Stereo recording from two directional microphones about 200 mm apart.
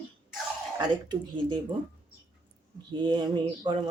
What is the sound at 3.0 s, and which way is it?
Speech, 20° right (ahead or behind).